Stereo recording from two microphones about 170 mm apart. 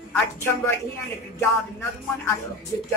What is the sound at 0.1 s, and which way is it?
Speech, 10° left (ahead or behind).